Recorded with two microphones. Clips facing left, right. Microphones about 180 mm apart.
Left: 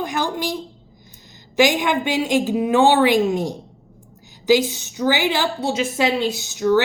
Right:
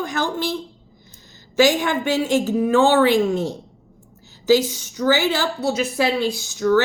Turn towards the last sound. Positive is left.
turn(degrees=20)  # may be behind; listen again after turning